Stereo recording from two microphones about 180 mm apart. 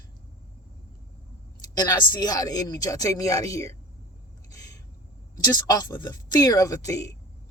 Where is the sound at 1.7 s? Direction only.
20° left (ahead or behind).